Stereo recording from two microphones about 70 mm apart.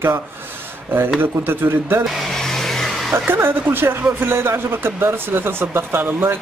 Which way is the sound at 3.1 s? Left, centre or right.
Right.